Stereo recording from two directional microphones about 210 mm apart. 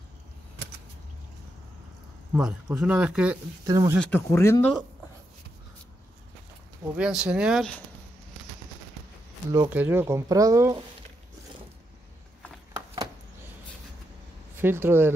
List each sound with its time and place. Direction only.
2.3 s speech: 5° right (ahead or behind)
3.6 s speech: 15° right (ahead or behind)
4.0 s speech: 10° left (ahead or behind)
7.0 s speech: 5° right (ahead or behind)
9.5 s speech: 10° right (ahead or behind)
12.7 s a sound: 15° right (ahead or behind)
14.6 s speech: 10° right (ahead or behind)